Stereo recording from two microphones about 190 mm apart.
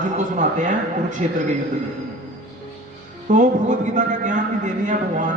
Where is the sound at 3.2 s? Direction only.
40° right (ahead or behind).